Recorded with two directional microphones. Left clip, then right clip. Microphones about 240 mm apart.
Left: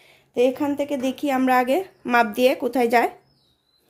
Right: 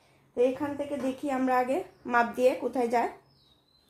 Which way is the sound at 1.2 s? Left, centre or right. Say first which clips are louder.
Left 8 dB; left.